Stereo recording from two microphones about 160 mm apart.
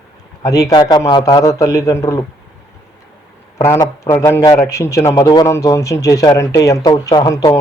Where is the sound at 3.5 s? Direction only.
20° left (ahead or behind).